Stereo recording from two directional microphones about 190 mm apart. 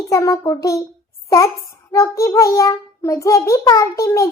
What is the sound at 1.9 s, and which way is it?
A child's voice, 15° left (ahead or behind).